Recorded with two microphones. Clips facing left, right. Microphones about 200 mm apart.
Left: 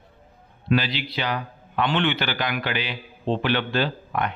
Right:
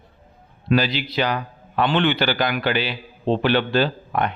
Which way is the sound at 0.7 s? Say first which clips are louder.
Right 3 dB; 40° right (ahead or behind).